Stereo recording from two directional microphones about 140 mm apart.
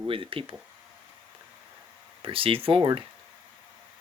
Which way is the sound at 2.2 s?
40° right (ahead or behind).